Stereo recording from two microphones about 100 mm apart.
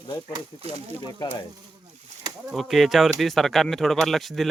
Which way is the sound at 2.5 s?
Centre (ahead or behind).